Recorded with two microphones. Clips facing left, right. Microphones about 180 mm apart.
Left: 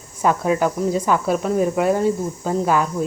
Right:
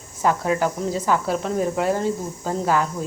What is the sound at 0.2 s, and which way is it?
Speech, 20° left (ahead or behind).